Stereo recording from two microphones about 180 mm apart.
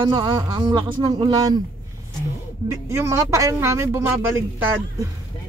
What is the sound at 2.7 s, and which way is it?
Speech, 15° right (ahead or behind).